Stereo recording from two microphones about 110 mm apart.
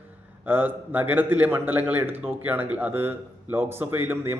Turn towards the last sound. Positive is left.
turn(degrees=-20)  # may be behind; listen again after turning